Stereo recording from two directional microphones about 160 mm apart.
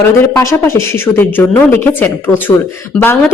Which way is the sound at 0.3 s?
15° left (ahead or behind).